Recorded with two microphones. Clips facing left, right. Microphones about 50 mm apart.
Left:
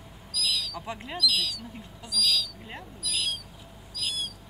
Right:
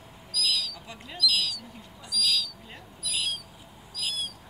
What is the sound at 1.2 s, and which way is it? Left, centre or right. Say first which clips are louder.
Bird: right 1 dB; centre.